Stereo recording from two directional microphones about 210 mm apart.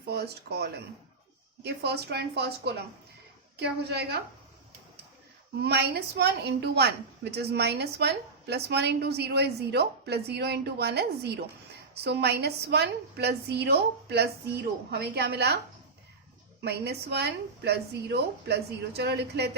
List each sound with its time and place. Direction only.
0.1 s a woman's voice: 50° right (ahead or behind)
5.6 s a woman's voice: 50° right (ahead or behind)
16.6 s a woman's voice: 50° right (ahead or behind)